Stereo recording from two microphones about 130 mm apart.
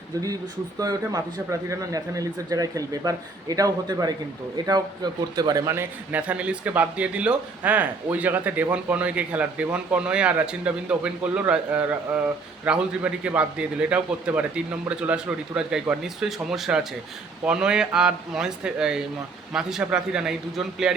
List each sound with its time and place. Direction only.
0.8 s speech: 30° right (ahead or behind)
5.7 s speech: 15° right (ahead or behind)